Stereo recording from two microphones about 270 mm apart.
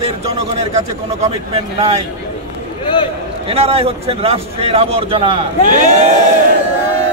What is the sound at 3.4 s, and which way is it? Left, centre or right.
A man's voice, right.